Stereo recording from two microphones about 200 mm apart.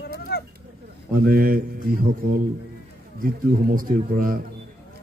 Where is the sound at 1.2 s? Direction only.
45° right (ahead or behind).